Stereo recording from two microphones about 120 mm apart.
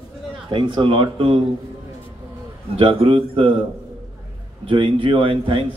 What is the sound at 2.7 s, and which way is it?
Speech, 55° right (ahead or behind).